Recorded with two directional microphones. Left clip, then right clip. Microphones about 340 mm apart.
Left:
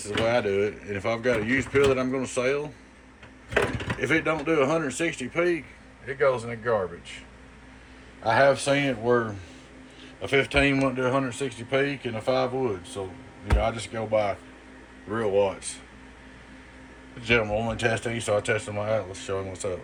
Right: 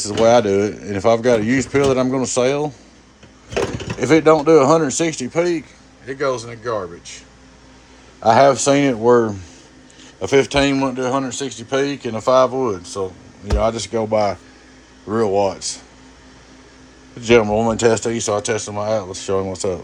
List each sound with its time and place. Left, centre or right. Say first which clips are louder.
0.0 s speech: right 11 dB; centre
4.0 s speech: right 13 dB; centre
8.2 s a man's voice: right 9 dB; right
10.4 s speech: right 5 dB; centre
17.2 s a man's voice: right 10 dB; right